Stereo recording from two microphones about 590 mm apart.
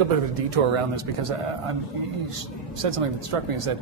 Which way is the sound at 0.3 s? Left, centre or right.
Right.